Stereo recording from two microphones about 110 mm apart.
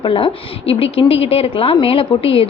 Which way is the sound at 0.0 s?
55° left (ahead or behind).